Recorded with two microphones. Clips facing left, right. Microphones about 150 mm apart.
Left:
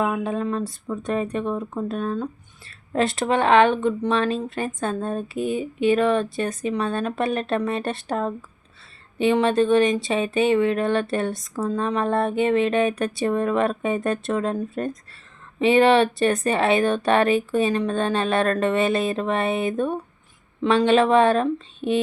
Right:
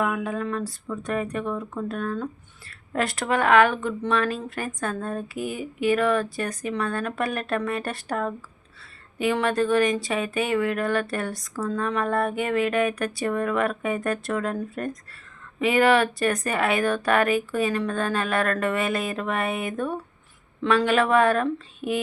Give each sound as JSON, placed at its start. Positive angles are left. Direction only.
{"t": 0.0, "sound": "speech", "side_deg": 25}